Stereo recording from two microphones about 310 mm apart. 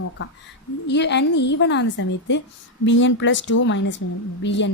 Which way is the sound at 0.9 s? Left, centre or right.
Left.